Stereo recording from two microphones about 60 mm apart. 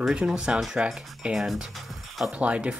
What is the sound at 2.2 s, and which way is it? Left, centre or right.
Speech, right.